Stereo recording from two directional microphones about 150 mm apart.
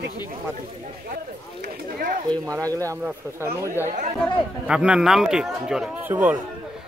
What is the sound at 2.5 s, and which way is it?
A man's voice, 20° right (ahead or behind).